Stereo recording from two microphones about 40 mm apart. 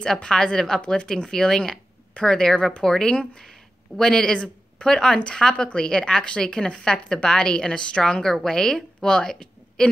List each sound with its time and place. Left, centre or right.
0.0 s a woman's voice: centre